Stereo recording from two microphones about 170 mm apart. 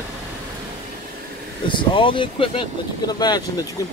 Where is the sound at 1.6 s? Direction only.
30° left (ahead or behind).